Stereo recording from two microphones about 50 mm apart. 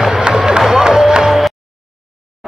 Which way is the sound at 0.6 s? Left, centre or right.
Centre.